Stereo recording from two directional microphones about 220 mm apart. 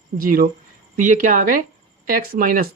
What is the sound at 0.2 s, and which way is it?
Speech, 40° right (ahead or behind).